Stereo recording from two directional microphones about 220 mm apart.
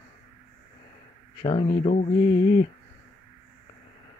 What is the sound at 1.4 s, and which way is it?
Speech, 25° left (ahead or behind).